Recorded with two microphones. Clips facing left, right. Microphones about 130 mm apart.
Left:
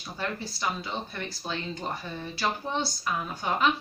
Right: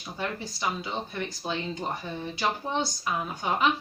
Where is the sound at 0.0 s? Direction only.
15° right (ahead or behind).